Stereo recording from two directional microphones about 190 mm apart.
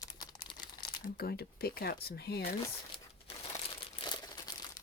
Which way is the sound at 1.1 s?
55° left (ahead or behind).